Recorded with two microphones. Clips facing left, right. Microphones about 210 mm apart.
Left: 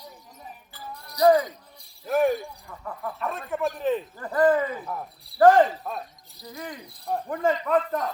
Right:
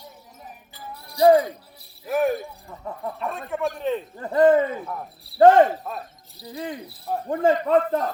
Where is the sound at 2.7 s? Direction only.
20° right (ahead or behind).